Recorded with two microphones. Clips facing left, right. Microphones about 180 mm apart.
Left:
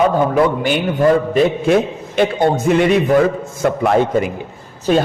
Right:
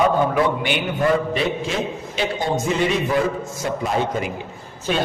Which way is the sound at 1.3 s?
55° left (ahead or behind).